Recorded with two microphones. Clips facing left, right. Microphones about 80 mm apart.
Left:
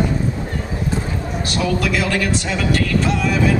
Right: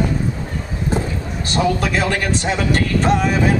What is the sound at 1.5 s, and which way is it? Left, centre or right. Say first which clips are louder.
A man's voice: right 2 dB; right.